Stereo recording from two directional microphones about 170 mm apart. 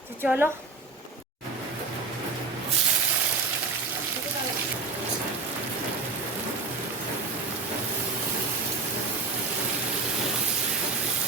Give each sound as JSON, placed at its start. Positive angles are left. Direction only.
{"t": 0.2, "sound": "a woman's voice", "side_deg": -15}